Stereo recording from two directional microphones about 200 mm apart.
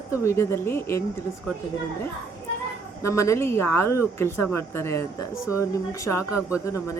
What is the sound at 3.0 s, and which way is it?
A woman's voice, 15° left (ahead or behind).